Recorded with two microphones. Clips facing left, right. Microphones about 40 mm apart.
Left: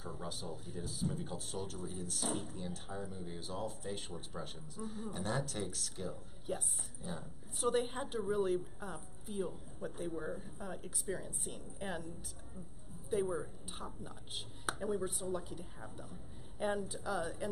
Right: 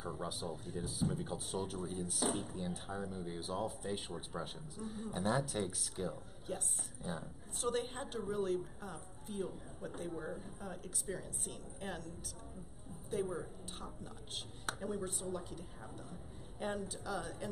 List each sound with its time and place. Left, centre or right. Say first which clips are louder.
0.0 s speech: right 3 dB; centre
6.5 s speech: left 2 dB; centre
7.0 s a woman's voice: right 2 dB; centre
7.6 s speech: left 3 dB; centre
13.1 s speech: left 3 dB; centre